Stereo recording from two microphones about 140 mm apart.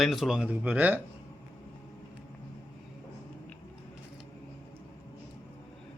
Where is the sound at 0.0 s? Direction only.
Centre (ahead or behind).